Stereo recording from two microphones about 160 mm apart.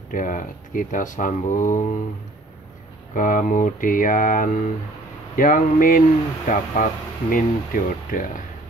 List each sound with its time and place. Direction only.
0.1 s speech: 55° left (ahead or behind)
3.2 s speech: 55° left (ahead or behind)